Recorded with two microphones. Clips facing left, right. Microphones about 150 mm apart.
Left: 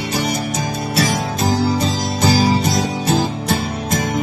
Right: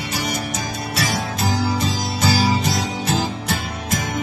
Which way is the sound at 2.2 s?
35° left (ahead or behind).